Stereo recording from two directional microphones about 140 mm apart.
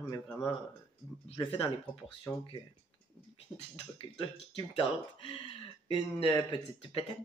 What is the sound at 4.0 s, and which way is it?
Speech, 40° left (ahead or behind).